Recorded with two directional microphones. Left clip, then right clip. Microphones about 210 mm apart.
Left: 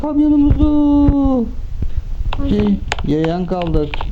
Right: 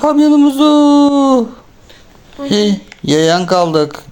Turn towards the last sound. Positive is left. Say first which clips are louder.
# right 8 dB
turn(degrees=-5)  # may be behind; listen again after turning